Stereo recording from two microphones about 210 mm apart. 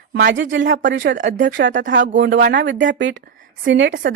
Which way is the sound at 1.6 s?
65° right (ahead or behind).